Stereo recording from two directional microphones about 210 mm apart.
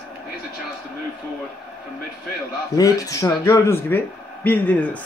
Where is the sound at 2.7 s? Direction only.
15° left (ahead or behind).